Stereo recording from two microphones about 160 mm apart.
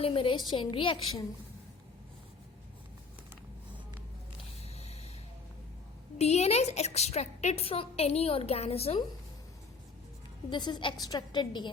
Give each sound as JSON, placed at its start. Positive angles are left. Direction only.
{"t": 0.0, "sound": "a woman's voice", "side_deg": 35}
{"t": 4.6, "sound": "a sound", "side_deg": 40}
{"t": 6.1, "sound": "a woman's voice", "side_deg": 45}
{"t": 10.5, "sound": "a woman's voice", "side_deg": 30}